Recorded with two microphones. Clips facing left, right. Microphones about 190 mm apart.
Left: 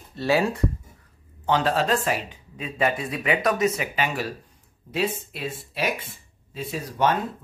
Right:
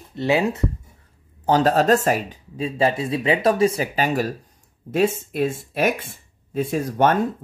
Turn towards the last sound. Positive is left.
turn(degrees=-50)  # may be behind; listen again after turning